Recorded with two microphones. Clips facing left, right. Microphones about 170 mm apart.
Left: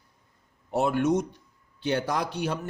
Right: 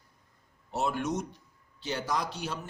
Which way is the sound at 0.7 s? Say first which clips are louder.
Left 7 dB; 55° left (ahead or behind).